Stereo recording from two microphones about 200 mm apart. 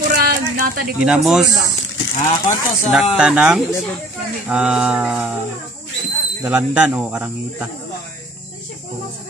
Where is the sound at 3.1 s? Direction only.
5° right (ahead or behind).